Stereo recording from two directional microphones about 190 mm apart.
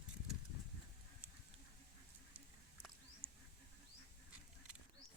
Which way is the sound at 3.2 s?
30° right (ahead or behind).